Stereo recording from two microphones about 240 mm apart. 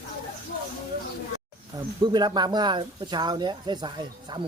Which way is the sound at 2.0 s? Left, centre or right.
Centre.